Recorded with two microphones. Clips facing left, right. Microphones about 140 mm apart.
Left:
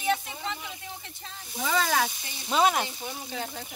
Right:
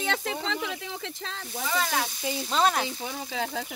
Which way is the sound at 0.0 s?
90° right.